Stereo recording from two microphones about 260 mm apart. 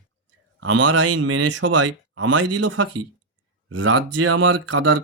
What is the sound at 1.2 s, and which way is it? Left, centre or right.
Speech, right.